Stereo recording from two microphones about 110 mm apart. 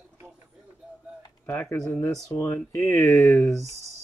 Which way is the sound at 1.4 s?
15° left (ahead or behind).